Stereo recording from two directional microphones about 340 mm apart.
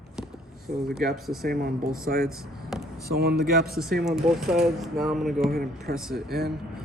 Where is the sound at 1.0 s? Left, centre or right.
Centre.